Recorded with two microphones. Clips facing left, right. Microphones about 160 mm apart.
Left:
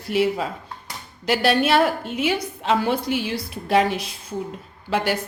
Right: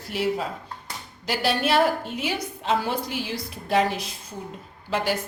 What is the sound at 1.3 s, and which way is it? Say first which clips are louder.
A woman's voice: left 5 dB; 70° left (ahead or behind).